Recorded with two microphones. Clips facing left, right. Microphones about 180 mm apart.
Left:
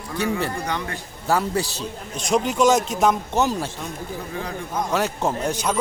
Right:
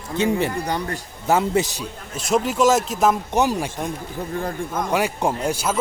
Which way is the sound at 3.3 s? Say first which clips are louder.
Right 2 dB; 15° right (ahead or behind).